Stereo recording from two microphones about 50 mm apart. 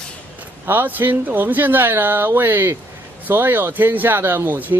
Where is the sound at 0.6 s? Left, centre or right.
Right.